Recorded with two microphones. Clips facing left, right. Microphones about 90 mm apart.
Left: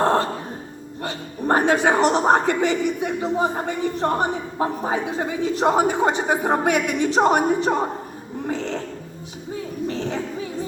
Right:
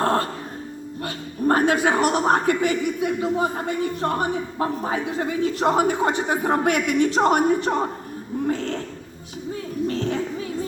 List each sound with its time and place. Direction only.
0.0 s music: 25° left (ahead or behind)
1.0 s a woman's voice: 25° left (ahead or behind)
9.8 s a sound: 20° left (ahead or behind)